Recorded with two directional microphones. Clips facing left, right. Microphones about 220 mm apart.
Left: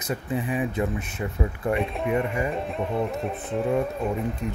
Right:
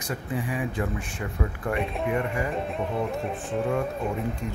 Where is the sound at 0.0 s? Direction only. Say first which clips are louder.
Left 3 dB; 20° left (ahead or behind).